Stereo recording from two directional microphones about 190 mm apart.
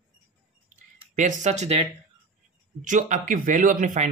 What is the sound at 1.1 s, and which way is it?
Speech, 40° right (ahead or behind).